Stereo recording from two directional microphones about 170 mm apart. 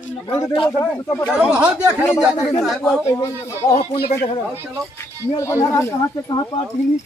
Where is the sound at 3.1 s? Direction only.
20° left (ahead or behind).